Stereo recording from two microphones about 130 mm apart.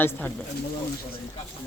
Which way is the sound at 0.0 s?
15° left (ahead or behind).